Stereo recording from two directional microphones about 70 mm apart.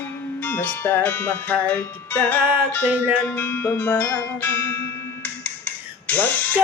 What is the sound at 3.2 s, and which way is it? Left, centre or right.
Music, left.